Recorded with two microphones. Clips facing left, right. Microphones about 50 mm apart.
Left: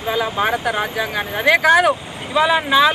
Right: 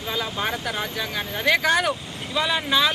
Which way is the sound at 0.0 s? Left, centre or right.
Centre.